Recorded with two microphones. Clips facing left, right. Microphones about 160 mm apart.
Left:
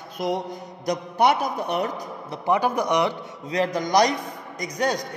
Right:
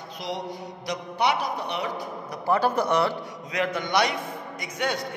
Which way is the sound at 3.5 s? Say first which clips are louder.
Left 4 dB; 35° left (ahead or behind).